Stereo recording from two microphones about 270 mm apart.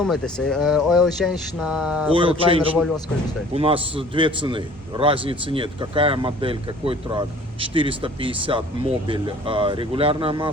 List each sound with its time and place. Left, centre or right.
0.0 s speech: centre
2.1 s a man's voice: centre
2.7 s speech: centre
3.5 s a man's voice: right